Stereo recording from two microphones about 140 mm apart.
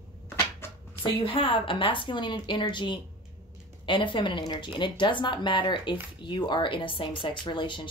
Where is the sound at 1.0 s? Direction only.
35° left (ahead or behind).